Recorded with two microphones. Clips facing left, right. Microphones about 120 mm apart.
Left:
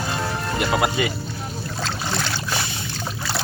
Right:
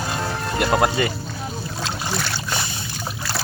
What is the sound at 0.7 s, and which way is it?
Speech, 40° right (ahead or behind).